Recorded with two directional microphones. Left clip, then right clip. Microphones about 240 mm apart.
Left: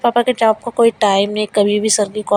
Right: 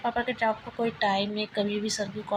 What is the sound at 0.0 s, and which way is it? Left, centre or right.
Speech, left.